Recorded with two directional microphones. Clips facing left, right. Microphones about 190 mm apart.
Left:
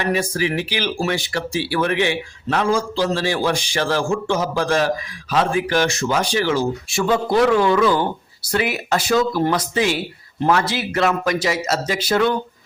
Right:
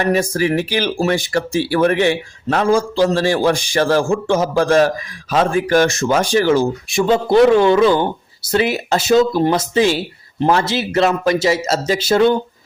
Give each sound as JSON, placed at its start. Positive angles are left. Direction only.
{"t": 0.0, "sound": "speech", "side_deg": -45}
{"t": 6.8, "sound": "speech", "side_deg": -20}